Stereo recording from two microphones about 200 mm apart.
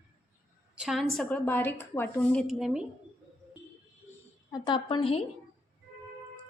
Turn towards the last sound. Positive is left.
turn(degrees=25)  # may be behind; listen again after turning